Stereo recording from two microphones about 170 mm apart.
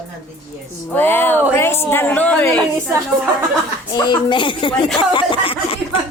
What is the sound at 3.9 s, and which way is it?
Speech, 25° left (ahead or behind).